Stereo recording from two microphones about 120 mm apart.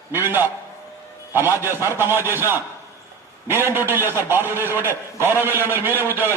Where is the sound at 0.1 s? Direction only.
20° right (ahead or behind).